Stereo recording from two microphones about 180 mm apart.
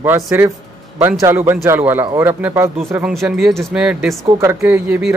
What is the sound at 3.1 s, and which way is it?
Speech, centre (ahead or behind).